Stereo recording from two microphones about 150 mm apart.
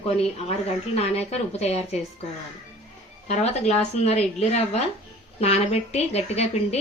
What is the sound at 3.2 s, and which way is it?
A woman's voice, 50° left (ahead or behind).